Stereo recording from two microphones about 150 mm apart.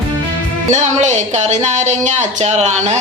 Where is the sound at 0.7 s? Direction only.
50° right (ahead or behind).